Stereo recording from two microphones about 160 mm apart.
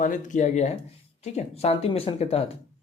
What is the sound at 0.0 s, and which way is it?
A man's voice, 55° left (ahead or behind).